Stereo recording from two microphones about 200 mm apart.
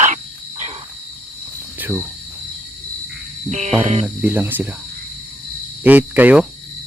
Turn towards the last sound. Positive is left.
turn(degrees=-5)  # may be behind; listen again after turning